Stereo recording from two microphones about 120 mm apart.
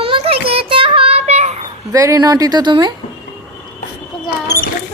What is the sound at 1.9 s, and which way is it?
Speech, 30° right (ahead or behind).